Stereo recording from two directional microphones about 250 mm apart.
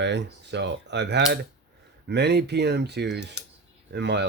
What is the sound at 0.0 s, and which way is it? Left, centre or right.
Speech, right.